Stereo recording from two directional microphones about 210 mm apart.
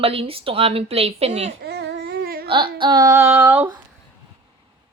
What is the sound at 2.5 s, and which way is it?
Speech, 20° right (ahead or behind).